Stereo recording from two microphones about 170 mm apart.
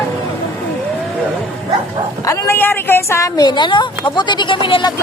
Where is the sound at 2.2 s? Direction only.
15° left (ahead or behind).